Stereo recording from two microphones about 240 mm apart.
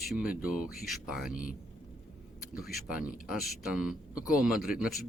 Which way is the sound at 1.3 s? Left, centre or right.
Left.